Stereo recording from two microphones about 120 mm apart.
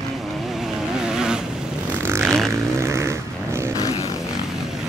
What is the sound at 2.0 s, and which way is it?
Vehicle, 20° right (ahead or behind).